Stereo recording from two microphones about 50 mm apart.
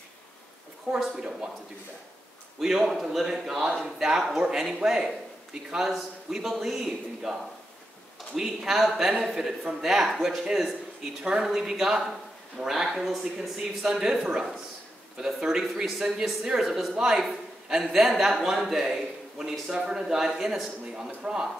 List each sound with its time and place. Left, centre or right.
0.9 s a man's voice: centre
2.6 s a man's voice: centre
8.4 s a man's voice: centre
20.9 s a man's voice: centre